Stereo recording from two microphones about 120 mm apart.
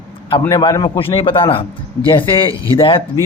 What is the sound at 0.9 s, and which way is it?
A man's voice, 45° left (ahead or behind).